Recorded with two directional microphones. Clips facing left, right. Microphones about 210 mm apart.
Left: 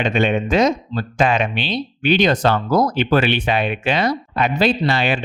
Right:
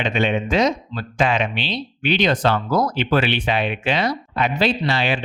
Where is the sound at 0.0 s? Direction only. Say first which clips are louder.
Left 3 dB; 50° left (ahead or behind).